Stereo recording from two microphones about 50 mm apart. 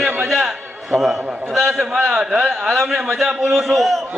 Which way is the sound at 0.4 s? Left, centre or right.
Centre.